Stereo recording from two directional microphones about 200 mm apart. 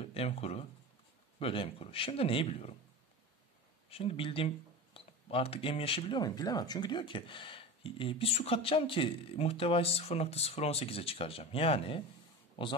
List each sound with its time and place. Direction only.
0.1 s speech: 30° left (ahead or behind)
3.9 s speech: 30° left (ahead or behind)